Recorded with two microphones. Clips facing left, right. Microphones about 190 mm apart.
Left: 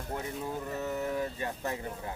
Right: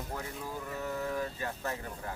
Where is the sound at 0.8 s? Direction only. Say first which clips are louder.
Left 1 dB; 20° left (ahead or behind).